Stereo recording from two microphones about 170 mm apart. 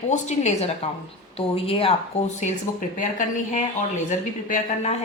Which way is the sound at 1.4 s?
35° left (ahead or behind).